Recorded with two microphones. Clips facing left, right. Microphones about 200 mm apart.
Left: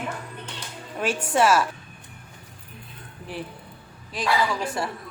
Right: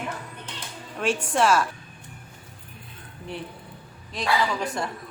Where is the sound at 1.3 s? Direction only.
5° left (ahead or behind).